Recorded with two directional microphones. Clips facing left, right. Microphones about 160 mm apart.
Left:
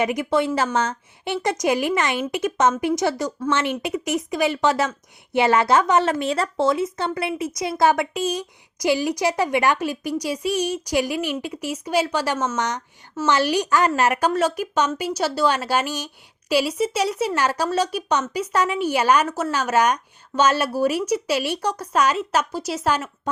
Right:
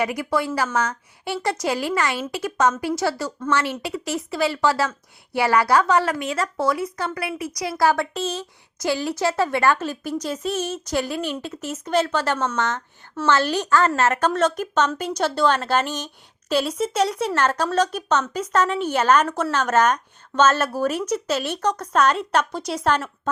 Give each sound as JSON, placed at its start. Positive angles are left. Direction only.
{"t": 0.0, "sound": "a woman's voice", "side_deg": 20}